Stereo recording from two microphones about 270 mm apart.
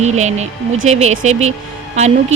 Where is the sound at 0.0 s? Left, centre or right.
Right.